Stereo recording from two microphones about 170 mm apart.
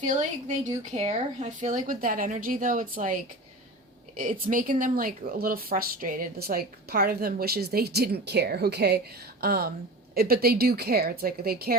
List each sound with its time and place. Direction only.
0.0 s speech: 45° right (ahead or behind)
4.2 s speech: 50° right (ahead or behind)